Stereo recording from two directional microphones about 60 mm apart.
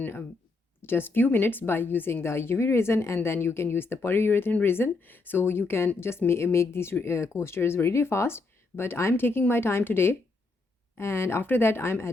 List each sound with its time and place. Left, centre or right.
0.8 s speech: left